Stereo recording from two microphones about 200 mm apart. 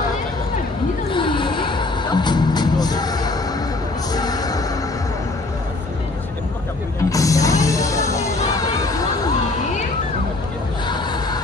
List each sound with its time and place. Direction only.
1.1 s music: 25° left (ahead or behind)
7.1 s music: 15° left (ahead or behind)